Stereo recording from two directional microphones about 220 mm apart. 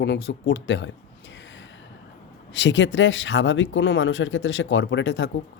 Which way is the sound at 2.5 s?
55° left (ahead or behind).